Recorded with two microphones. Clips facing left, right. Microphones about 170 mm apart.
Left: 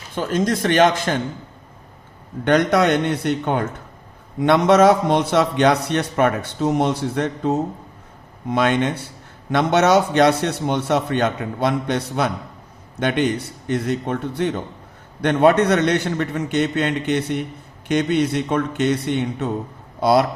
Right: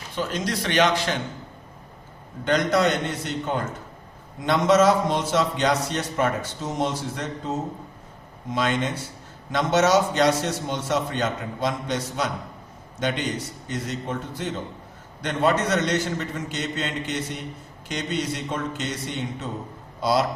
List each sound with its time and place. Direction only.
0.2 s a man's voice: 50° left (ahead or behind)
2.4 s a man's voice: 60° left (ahead or behind)